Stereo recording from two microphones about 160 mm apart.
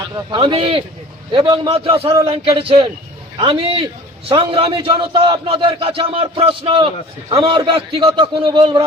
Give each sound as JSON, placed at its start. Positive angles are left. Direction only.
{"t": 0.3, "sound": "a man's voice", "side_deg": -35}